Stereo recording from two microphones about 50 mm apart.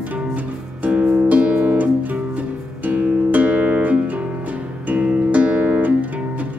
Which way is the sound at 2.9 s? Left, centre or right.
Right.